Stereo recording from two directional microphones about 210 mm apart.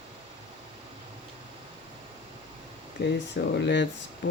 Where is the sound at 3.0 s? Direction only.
55° left (ahead or behind).